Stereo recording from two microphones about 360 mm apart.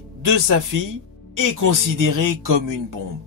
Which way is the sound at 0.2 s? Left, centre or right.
Right.